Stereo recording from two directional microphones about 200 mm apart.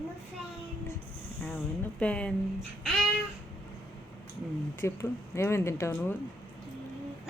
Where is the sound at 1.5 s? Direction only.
10° left (ahead or behind).